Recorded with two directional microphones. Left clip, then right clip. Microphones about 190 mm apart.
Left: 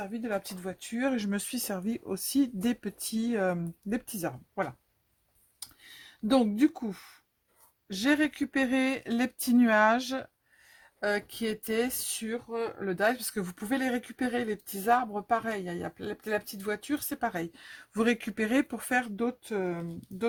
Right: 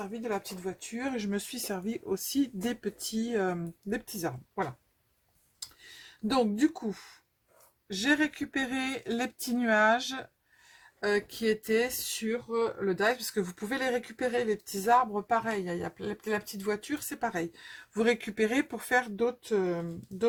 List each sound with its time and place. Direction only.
0.2 s speech: 45° left (ahead or behind)
6.3 s speech: 40° left (ahead or behind)